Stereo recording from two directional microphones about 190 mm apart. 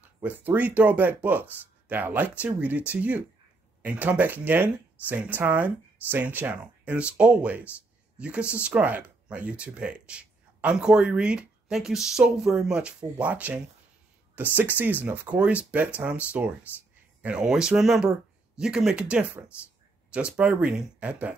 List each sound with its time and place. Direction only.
0.2 s speech: 10° right (ahead or behind)